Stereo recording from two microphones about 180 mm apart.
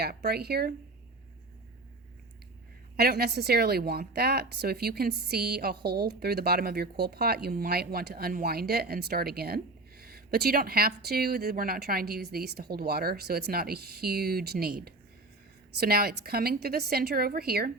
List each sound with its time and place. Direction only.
0.0 s a woman's voice: 60° right (ahead or behind)
2.9 s a woman's voice: 60° right (ahead or behind)